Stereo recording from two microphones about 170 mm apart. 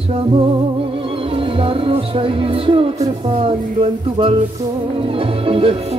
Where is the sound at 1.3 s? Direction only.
30° right (ahead or behind).